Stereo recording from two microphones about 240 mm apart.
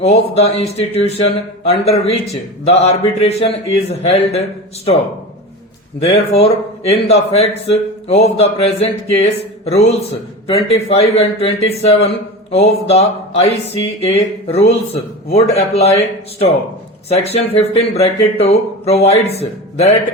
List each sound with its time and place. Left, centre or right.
0.0 s a man's voice: left
6.1 s a man's voice: left
17.1 s a man's voice: left